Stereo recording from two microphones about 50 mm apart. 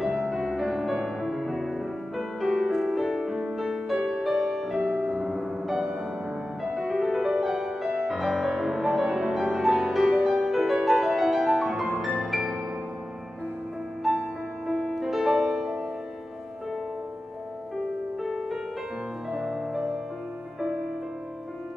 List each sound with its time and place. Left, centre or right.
0.0 s music: centre
8.2 s music: centre
10.0 s music: right
10.4 s music: centre
14.7 s music: centre
18.2 s music: centre